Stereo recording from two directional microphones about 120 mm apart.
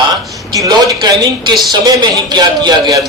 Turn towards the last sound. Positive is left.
turn(degrees=-30)  # may be behind; listen again after turning